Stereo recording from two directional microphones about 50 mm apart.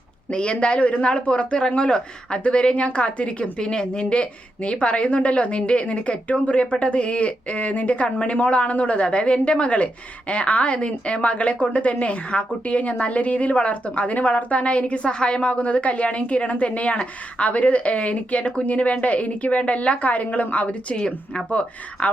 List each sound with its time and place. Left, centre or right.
0.3 s speech: left
20.9 s speech: centre